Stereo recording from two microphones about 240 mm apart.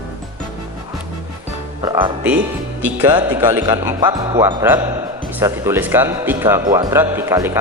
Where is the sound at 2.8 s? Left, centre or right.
Centre.